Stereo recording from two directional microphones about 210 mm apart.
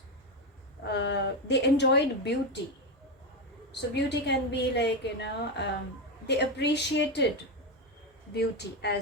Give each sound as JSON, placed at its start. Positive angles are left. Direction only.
{"t": 0.9, "sound": "a woman's voice", "side_deg": 55}
{"t": 3.8, "sound": "a woman's voice", "side_deg": 55}
{"t": 8.3, "sound": "a woman's voice", "side_deg": 50}